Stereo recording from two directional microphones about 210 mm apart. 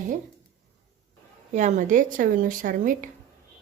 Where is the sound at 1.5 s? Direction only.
35° right (ahead or behind).